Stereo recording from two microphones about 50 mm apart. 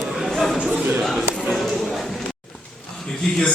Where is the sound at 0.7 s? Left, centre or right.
Right.